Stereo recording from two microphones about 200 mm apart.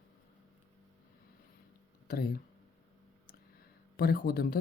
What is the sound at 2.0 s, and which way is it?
Speech, 50° left (ahead or behind).